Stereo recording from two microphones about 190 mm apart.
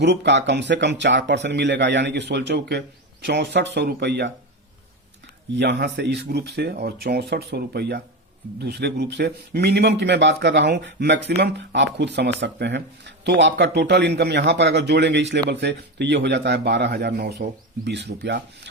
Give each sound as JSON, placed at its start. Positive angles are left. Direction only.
{"t": 0.0, "sound": "speech", "side_deg": -65}
{"t": 5.5, "sound": "speech", "side_deg": -65}